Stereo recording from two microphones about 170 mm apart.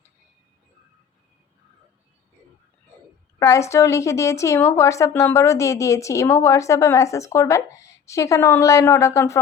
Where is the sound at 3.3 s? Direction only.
20° left (ahead or behind).